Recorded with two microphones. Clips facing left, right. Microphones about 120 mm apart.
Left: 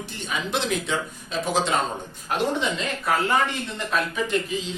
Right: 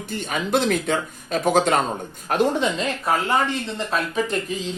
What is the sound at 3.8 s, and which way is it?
Speech, 35° right (ahead or behind).